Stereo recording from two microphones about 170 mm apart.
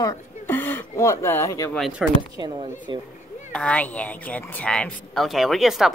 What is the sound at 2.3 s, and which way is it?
Speech, 25° right (ahead or behind).